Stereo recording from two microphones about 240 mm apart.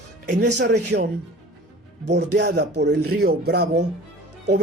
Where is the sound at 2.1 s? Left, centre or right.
Right.